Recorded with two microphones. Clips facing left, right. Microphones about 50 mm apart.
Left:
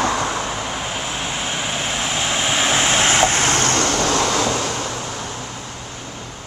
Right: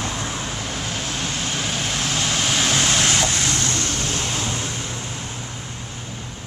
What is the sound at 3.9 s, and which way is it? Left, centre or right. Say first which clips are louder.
Vehicle: left 8 dB; left.